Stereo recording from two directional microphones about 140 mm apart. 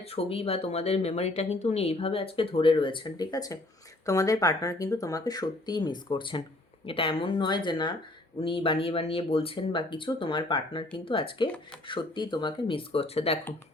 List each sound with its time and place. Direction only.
0.0 s speech: 45° left (ahead or behind)